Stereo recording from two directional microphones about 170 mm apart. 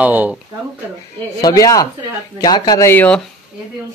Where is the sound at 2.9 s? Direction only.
10° left (ahead or behind).